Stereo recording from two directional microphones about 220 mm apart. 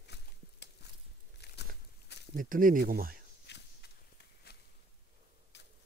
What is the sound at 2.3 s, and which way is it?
Speech, 40° right (ahead or behind).